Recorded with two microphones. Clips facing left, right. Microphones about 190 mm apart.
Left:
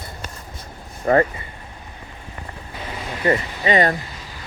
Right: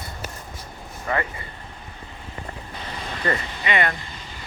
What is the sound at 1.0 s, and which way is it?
Speech, 45° left (ahead or behind).